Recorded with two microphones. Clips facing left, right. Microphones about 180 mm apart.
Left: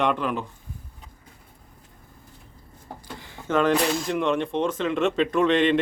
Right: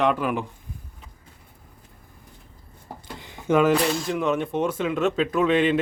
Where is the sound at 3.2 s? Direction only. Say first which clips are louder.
Right 3 dB; 15° right (ahead or behind).